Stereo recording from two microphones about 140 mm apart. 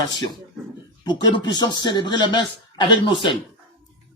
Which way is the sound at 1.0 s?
30° left (ahead or behind).